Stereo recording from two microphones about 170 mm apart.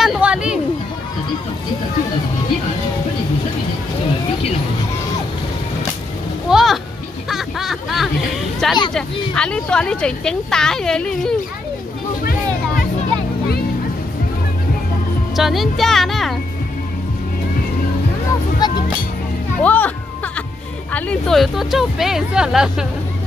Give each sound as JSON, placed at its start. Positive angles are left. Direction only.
{"t": 0.0, "sound": "a sound", "side_deg": -5}
{"t": 6.5, "sound": "a sound", "side_deg": 0}
{"t": 7.2, "sound": "snicker", "side_deg": 0}
{"t": 8.6, "sound": "a woman's voice", "side_deg": 0}
{"t": 15.3, "sound": "a woman's voice", "side_deg": 0}
{"t": 18.6, "sound": "music", "side_deg": 25}
{"t": 19.6, "sound": "a child's voice", "side_deg": 10}
{"t": 20.9, "sound": "a woman's voice", "side_deg": 5}